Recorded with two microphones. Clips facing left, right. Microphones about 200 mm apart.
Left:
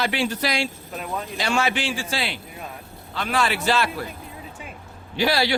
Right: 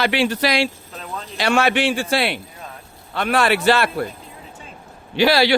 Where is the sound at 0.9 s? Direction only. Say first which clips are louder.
Left 2 dB; 15° left (ahead or behind).